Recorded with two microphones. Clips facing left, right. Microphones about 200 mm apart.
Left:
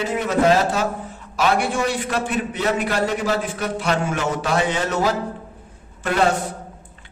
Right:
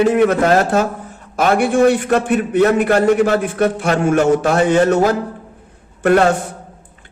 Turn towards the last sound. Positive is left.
turn(degrees=-55)  # may be behind; listen again after turning